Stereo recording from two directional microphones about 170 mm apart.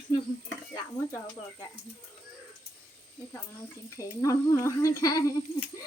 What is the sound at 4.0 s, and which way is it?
Speech, 15° left (ahead or behind).